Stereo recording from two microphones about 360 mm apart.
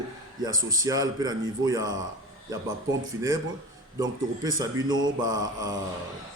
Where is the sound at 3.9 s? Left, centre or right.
Centre.